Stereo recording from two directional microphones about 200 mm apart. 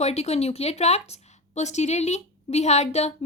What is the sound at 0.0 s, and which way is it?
Speech, 30° left (ahead or behind).